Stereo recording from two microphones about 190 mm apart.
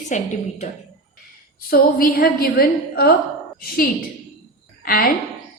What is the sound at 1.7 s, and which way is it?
A woman's voice, 50° left (ahead or behind).